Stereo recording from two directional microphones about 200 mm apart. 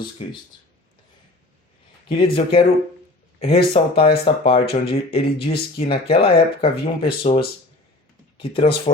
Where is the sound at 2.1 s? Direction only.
25° left (ahead or behind).